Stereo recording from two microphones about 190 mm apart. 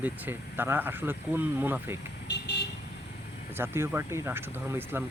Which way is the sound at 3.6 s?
10° right (ahead or behind).